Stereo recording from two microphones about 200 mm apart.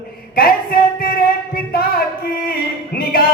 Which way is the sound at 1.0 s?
50° left (ahead or behind).